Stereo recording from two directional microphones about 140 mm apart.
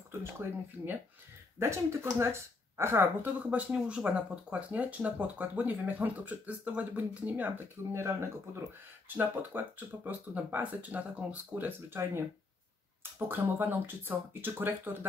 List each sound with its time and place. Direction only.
0.2 s speech: 15° right (ahead or behind)
13.3 s speech: 15° right (ahead or behind)